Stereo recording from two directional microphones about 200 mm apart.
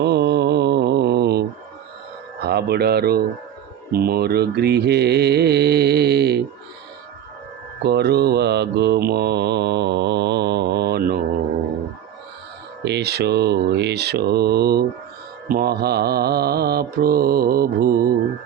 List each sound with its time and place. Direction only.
0.0 s mantra: 55° right (ahead or behind)
2.4 s speech: 55° right (ahead or behind)
3.9 s mantra: 50° right (ahead or behind)
7.8 s mantra: 55° right (ahead or behind)
12.8 s mantra: 55° right (ahead or behind)